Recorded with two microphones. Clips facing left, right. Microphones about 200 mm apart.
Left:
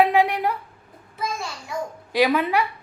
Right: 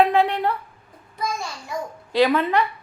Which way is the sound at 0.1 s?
10° left (ahead or behind).